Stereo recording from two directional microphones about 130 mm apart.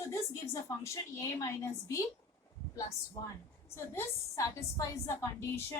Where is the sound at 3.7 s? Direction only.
20° left (ahead or behind).